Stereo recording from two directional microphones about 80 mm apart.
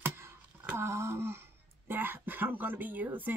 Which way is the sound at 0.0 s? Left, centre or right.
Right.